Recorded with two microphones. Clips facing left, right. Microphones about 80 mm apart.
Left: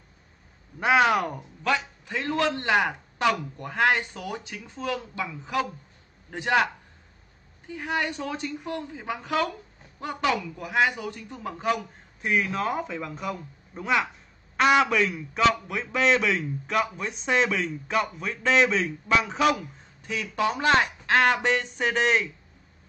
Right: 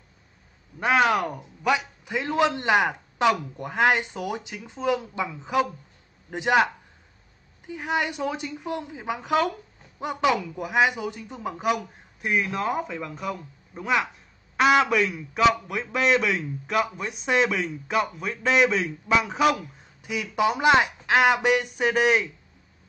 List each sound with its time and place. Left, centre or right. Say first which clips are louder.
0.7 s a man's voice: even; centre
1.4 s a man's voice: right 2 dB; centre
12.3 s a man's voice: even; centre